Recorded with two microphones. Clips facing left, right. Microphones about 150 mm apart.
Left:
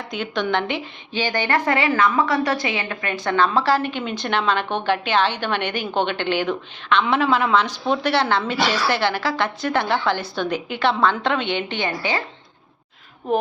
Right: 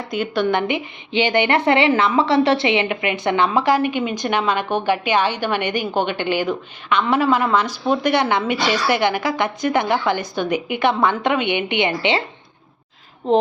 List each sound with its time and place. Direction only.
0.1 s a woman's voice: 10° right (ahead or behind)